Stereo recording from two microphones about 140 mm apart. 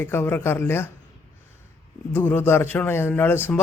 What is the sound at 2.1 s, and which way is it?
Speech, 15° left (ahead or behind).